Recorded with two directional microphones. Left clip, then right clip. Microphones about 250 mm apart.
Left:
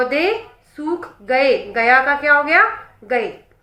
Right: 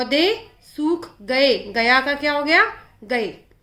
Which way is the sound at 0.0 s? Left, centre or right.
Right.